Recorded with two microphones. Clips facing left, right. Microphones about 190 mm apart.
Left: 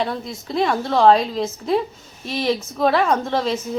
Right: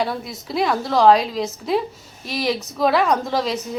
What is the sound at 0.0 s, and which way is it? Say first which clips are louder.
A woman's voice: even; 5° right (ahead or behind).